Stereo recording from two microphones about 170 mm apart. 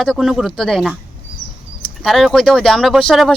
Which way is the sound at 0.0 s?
Centre (ahead or behind).